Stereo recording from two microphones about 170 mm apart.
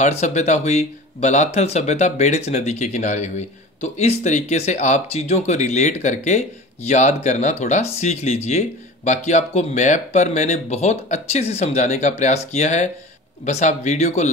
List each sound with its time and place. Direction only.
0.0 s speech: 40° left (ahead or behind)